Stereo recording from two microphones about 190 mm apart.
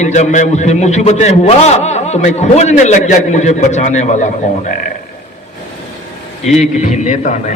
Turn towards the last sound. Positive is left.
turn(degrees=40)  # may be behind; listen again after turning